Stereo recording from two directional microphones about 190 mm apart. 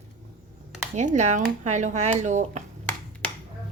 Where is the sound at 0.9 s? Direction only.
40° right (ahead or behind).